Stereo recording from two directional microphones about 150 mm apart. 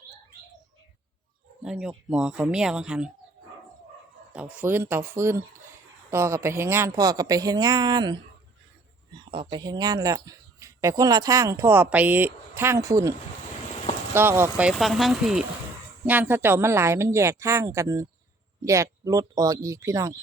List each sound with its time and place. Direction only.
1.6 s speech: 5° right (ahead or behind)
4.3 s speech: 10° right (ahead or behind); by 8.2 s 30° right (ahead or behind)
9.3 s speech: 30° right (ahead or behind); by 14.7 s 15° right (ahead or behind)
14.7 s speech: centre (ahead or behind); by 20.1 s 20° right (ahead or behind)